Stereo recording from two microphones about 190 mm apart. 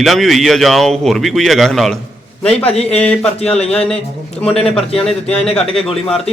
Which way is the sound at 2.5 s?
30° left (ahead or behind).